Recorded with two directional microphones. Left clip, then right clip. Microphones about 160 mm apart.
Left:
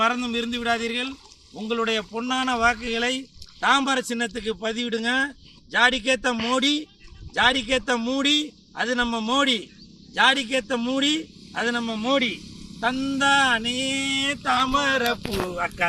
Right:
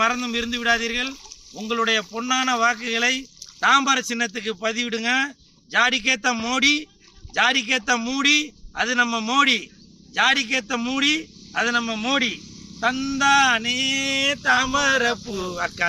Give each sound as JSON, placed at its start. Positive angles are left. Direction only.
{"t": 0.0, "sound": "a man's voice", "side_deg": 0}
{"t": 15.4, "sound": "speech", "side_deg": -25}